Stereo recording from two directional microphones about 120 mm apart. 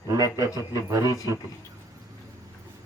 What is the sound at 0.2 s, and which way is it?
Speech, 30° right (ahead or behind).